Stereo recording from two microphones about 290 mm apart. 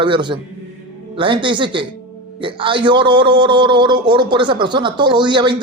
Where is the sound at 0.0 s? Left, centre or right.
Centre.